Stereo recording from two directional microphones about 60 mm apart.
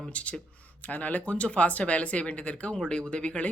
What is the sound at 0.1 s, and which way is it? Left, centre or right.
Speech, left.